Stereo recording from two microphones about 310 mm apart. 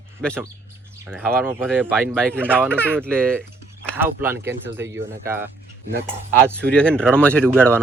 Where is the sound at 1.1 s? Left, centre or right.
Centre.